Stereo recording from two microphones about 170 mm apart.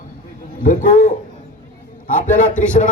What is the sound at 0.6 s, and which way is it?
Speech, 55° left (ahead or behind).